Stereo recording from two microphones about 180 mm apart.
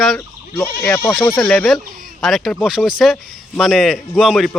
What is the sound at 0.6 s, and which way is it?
Speech, 10° left (ahead or behind).